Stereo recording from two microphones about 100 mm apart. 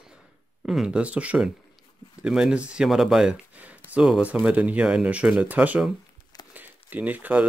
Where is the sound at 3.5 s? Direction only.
15° right (ahead or behind).